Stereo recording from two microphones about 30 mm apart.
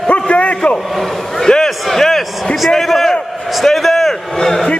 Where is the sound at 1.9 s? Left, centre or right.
Centre.